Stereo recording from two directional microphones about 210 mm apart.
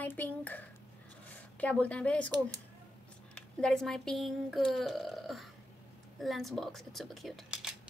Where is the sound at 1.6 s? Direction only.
5° left (ahead or behind).